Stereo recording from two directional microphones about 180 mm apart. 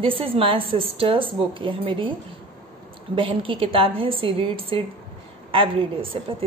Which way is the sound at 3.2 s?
30° right (ahead or behind).